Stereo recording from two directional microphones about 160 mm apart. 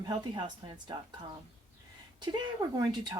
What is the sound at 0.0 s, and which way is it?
Speech, 30° right (ahead or behind).